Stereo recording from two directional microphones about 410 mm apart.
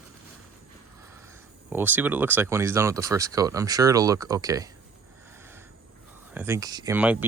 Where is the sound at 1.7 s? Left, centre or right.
Centre.